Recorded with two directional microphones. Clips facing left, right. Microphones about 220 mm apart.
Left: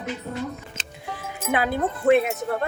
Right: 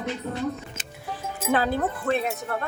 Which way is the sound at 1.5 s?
15° left (ahead or behind).